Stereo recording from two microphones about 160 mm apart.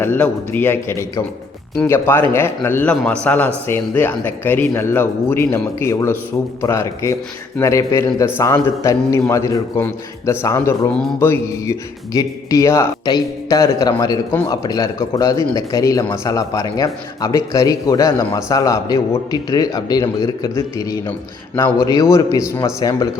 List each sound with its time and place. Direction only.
0.0 s a man's voice: 10° left (ahead or behind)